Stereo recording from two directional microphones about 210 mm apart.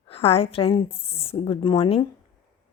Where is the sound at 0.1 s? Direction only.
30° left (ahead or behind).